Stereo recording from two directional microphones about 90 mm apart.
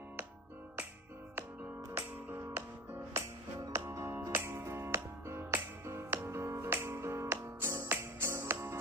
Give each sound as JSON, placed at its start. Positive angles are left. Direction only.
{"t": 2.0, "sound": "music", "side_deg": -25}